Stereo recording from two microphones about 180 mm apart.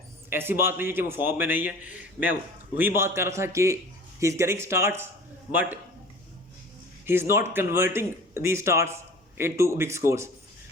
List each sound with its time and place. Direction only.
0.3 s a man's voice: 10° right (ahead or behind)
7.0 s a man's voice: 15° right (ahead or behind)